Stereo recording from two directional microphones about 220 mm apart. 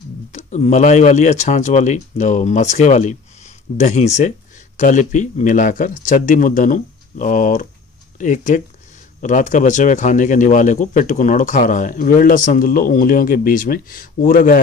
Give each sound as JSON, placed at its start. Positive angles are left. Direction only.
{"t": 0.3, "sound": "a man's voice", "side_deg": 35}